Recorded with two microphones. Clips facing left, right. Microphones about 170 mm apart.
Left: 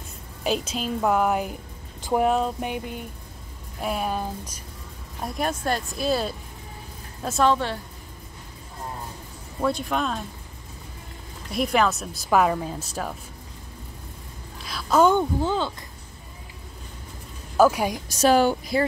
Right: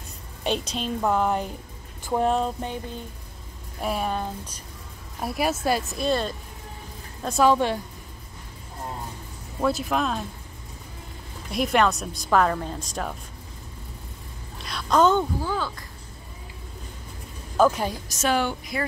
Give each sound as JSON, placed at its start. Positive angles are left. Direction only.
{"t": 0.4, "sound": "speech", "side_deg": 5}
{"t": 2.6, "sound": "a sound", "side_deg": 15}
{"t": 3.8, "sound": "speech", "side_deg": 0}
{"t": 5.2, "sound": "speech", "side_deg": -5}
{"t": 7.5, "sound": "a woman's voice", "side_deg": -15}
{"t": 9.6, "sound": "speech", "side_deg": -5}
{"t": 11.4, "sound": "speech", "side_deg": 0}
{"t": 14.6, "sound": "a sound", "side_deg": 0}
{"t": 15.4, "sound": "speech", "side_deg": 25}
{"t": 17.6, "sound": "a sound", "side_deg": 10}
{"t": 18.0, "sound": "speech", "side_deg": 35}